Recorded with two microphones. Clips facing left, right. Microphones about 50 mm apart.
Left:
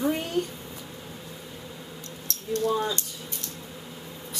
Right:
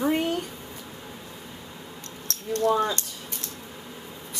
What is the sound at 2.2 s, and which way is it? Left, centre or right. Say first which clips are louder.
Speech: right 3 dB; right.